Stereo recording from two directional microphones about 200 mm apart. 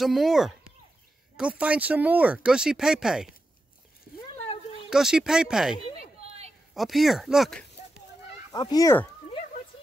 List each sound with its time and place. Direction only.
0.0 s speech: centre (ahead or behind)
4.8 s speech: 5° right (ahead or behind)
6.2 s a sound: 30° right (ahead or behind)
6.7 s speech: centre (ahead or behind)
8.5 s speech: 20° left (ahead or behind)